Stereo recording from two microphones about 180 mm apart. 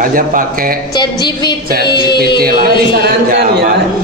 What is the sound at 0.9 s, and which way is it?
Speech, 25° left (ahead or behind).